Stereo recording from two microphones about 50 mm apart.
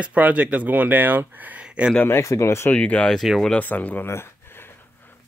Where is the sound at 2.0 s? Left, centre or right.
Left.